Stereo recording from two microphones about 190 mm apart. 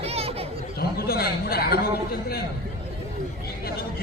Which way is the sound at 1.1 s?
55° left (ahead or behind).